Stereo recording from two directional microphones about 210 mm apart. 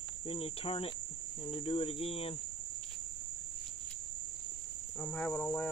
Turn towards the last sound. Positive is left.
turn(degrees=5)  # may be behind; listen again after turning